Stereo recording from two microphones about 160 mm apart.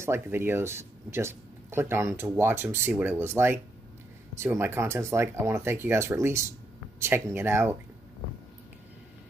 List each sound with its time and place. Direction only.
0.0 s speech: 15° right (ahead or behind)